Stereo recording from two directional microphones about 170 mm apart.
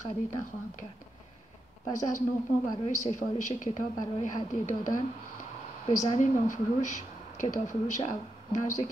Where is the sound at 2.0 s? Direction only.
50° left (ahead or behind).